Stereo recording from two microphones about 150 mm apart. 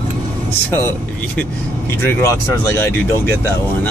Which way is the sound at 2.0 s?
15° left (ahead or behind).